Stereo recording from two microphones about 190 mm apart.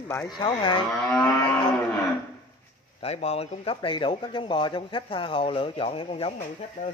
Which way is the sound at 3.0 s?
35° left (ahead or behind).